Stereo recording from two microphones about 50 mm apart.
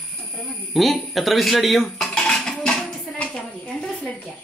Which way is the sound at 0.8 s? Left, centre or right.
Centre.